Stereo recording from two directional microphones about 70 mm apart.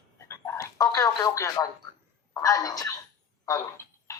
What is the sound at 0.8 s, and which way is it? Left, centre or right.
Speech, left.